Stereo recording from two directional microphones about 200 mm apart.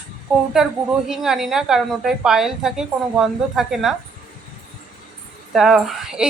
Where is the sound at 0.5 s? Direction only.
5° right (ahead or behind).